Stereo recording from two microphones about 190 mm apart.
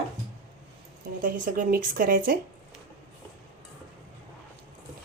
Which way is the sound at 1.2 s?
45° right (ahead or behind).